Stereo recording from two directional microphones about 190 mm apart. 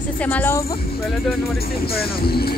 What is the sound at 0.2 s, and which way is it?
Speech, 10° left (ahead or behind).